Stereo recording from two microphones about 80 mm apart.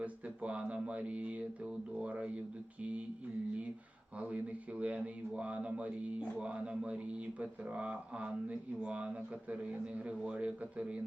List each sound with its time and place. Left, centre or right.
0.0 s a man's voice: centre
4.2 s a man's voice: centre
10.2 s a man's voice: centre